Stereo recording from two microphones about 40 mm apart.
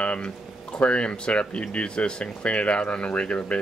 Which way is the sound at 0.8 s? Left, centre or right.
Left.